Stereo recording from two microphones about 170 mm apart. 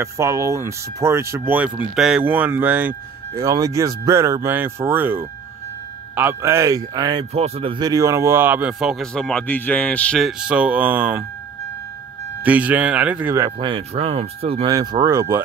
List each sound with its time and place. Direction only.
0.0 s speech: 15° right (ahead or behind)
7.3 s speech: 35° right (ahead or behind); by 11.2 s 10° right (ahead or behind)
12.4 s speech: 10° right (ahead or behind)
13.6 s speech: 35° right (ahead or behind)
14.7 s speech: 25° right (ahead or behind)